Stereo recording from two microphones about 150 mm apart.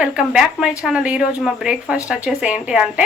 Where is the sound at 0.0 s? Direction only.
5° right (ahead or behind).